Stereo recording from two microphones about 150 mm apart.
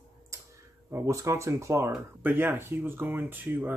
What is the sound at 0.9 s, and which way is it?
Speech, 20° right (ahead or behind).